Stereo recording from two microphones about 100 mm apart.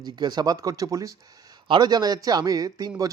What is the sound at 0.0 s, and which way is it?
Speech, 45° right (ahead or behind).